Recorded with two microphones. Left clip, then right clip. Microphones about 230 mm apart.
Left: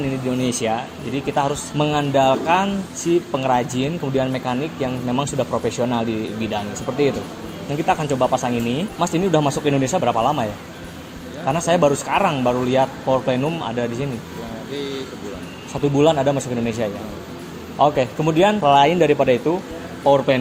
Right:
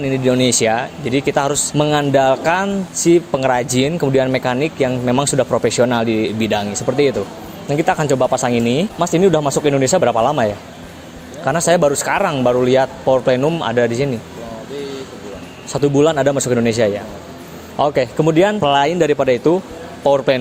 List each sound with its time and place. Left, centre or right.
0.0 s speech: right
15.7 s speech: right